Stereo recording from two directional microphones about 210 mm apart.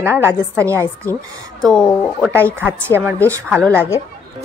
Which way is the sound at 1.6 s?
5° left (ahead or behind).